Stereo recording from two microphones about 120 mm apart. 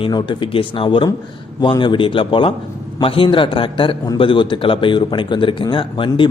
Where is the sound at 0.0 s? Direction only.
40° left (ahead or behind).